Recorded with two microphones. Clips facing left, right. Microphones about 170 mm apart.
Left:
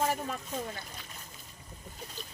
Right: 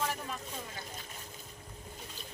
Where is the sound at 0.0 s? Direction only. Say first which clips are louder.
Left 5 dB; 45° left (ahead or behind).